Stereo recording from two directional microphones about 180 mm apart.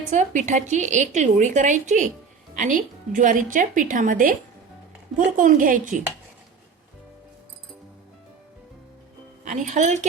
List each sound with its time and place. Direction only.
0.1 s a woman's voice: 45° right (ahead or behind)
9.4 s speech: 40° right (ahead or behind)